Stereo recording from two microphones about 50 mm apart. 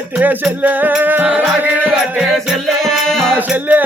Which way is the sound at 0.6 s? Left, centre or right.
Right.